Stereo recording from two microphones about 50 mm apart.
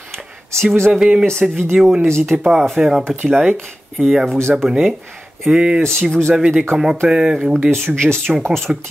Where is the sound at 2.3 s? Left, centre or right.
Right.